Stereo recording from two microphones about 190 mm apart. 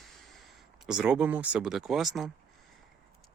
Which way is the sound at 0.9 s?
5° right (ahead or behind).